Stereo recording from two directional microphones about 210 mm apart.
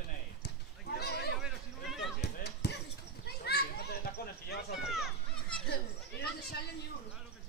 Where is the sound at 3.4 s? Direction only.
50° left (ahead or behind).